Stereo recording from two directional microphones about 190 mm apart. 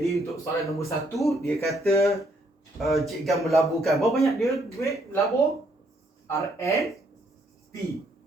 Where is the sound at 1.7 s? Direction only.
Centre (ahead or behind).